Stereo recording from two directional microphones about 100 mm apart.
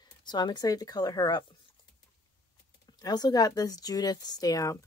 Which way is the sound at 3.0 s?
40° left (ahead or behind).